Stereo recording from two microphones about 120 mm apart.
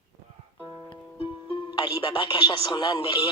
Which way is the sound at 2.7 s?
35° left (ahead or behind).